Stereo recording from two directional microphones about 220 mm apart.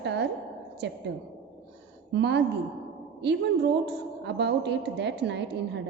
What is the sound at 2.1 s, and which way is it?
Speech, 50° right (ahead or behind).